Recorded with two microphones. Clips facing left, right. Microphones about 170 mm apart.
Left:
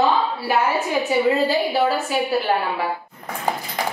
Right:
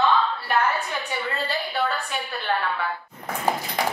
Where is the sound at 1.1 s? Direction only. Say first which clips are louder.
Left 13 dB; 20° left (ahead or behind).